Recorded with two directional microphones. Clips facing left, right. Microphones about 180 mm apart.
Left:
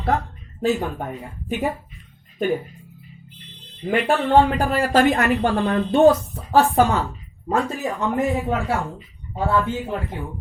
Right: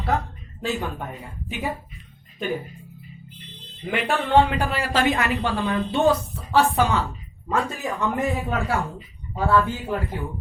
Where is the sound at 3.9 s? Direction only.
40° left (ahead or behind).